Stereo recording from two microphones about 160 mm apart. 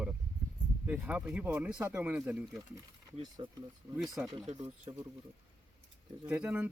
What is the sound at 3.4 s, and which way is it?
Speech, 30° right (ahead or behind).